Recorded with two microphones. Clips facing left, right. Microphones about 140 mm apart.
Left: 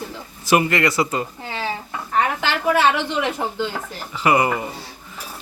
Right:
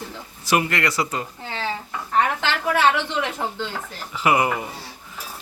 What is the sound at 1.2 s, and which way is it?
A woman's voice, 15° left (ahead or behind).